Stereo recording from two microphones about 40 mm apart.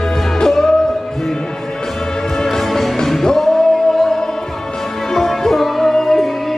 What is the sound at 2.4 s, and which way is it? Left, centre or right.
Music, centre.